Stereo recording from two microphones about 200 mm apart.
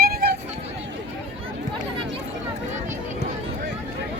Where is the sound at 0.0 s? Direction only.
50° right (ahead or behind).